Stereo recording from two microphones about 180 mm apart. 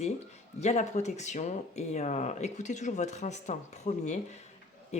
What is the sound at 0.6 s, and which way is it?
Speech, 40° left (ahead or behind).